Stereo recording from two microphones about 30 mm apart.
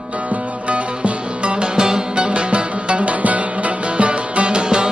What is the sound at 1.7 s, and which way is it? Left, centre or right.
Music, right.